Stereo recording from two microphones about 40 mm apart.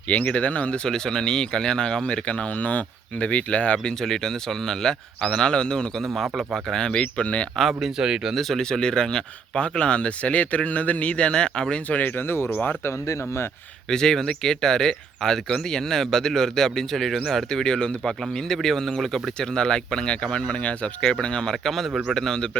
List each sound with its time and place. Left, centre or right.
0.2 s speech: left
0.9 s speech: centre; by 3.9 s left
4.0 s speech: centre
6.2 s speech: centre
7.0 s speech: left
7.7 s speech: centre
8.4 s speech: centre
8.8 s speech: centre
11.9 s speech: left
13.9 s speech: centre
19.4 s speech: left
21.5 s speech: centre